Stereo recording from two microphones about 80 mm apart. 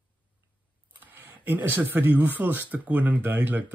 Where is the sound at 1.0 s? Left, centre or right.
Right.